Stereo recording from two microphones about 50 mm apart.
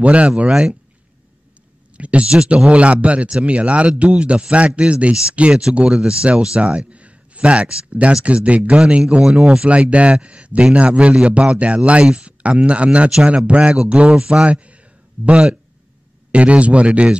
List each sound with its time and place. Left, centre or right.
0.0 s speech: right
0.5 s speech: centre
2.0 s speech: right